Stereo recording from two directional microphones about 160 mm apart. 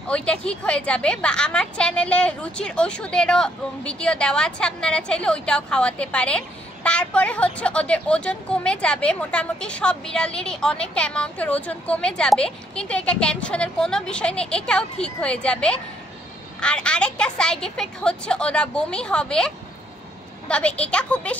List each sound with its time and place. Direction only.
0.1 s a woman's voice: 5° left (ahead or behind)